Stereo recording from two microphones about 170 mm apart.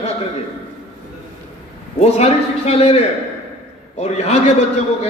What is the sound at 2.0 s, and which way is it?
A man's voice, 40° left (ahead or behind).